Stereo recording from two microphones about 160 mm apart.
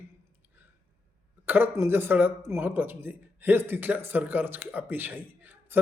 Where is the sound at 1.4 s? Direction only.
15° right (ahead or behind).